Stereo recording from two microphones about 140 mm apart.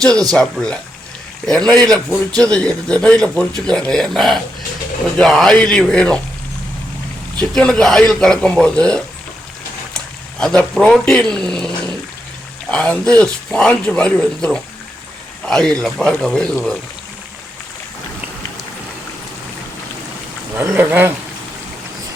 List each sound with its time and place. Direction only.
0.3 s a man's voice: 5° left (ahead or behind)
7.3 s speech: 5° left (ahead or behind)
12.7 s a man's voice: 5° left (ahead or behind)
20.6 s speech: 15° right (ahead or behind)